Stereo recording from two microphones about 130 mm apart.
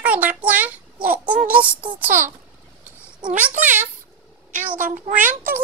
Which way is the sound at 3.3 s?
70° right (ahead or behind).